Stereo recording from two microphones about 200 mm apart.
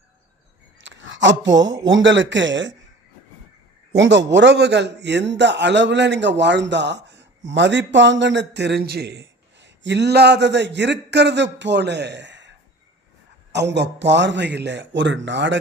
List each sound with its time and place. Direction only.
0.8 s speech: 65° right (ahead or behind)
3.9 s a man's voice: 65° right (ahead or behind)